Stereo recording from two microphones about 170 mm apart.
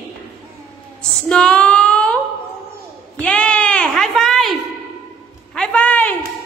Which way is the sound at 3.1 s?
5° left (ahead or behind).